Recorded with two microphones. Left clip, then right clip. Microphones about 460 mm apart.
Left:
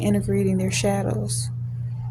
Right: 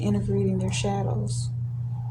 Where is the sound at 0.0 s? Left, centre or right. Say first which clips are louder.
Left 4 dB; left.